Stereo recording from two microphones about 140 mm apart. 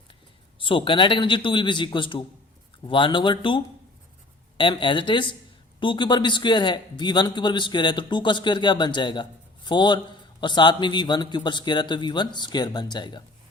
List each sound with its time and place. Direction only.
0.6 s a man's voice: 40° left (ahead or behind)